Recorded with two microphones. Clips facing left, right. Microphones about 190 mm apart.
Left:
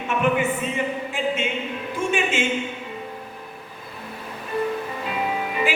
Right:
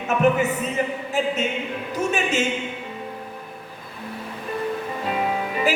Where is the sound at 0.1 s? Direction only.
40° right (ahead or behind).